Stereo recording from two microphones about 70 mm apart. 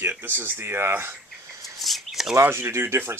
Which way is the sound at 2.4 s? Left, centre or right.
Right.